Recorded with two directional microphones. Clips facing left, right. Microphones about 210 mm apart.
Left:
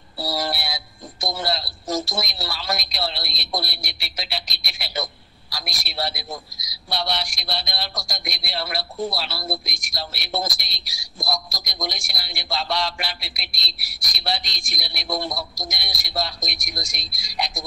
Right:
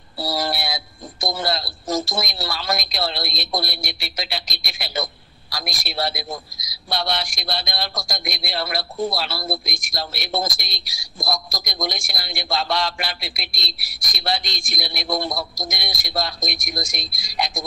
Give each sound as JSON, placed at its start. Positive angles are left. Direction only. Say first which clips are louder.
{"t": 0.3, "sound": "speech", "louder": "right 2 dB", "side_deg": -50}